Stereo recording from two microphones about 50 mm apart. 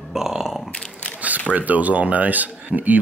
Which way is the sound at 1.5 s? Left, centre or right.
Right.